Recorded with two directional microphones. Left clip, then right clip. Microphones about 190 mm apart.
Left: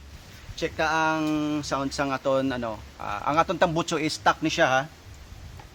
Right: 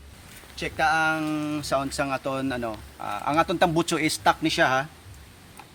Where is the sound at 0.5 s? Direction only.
15° left (ahead or behind).